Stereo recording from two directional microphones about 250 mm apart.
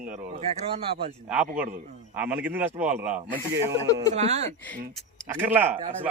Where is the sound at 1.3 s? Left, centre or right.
Centre.